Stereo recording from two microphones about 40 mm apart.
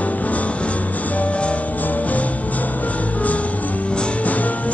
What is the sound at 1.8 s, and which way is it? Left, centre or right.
Music, left.